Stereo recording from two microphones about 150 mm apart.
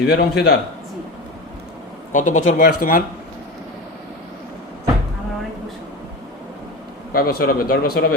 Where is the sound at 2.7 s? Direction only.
75° left (ahead or behind).